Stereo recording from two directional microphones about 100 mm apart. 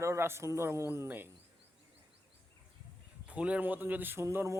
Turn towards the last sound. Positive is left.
turn(degrees=-25)  # may be behind; listen again after turning